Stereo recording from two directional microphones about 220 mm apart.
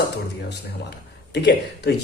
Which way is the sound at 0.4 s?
50° left (ahead or behind).